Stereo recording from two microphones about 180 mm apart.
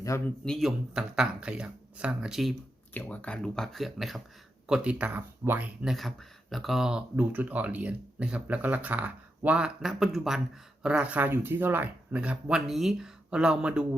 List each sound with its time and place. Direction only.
0.1 s a man's voice: 15° left (ahead or behind)
0.4 s speech: centre (ahead or behind)